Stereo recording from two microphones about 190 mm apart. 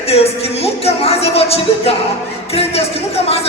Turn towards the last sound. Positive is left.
turn(degrees=30)  # may be behind; listen again after turning